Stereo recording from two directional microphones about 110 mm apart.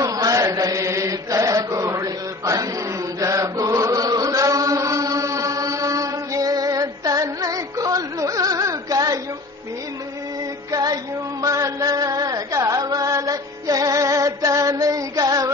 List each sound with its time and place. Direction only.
0.0 s chant: 35° right (ahead or behind)
10.7 s music: 35° right (ahead or behind)